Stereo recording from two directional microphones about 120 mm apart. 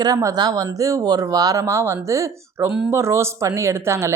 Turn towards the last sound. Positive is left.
turn(degrees=-20)  # may be behind; listen again after turning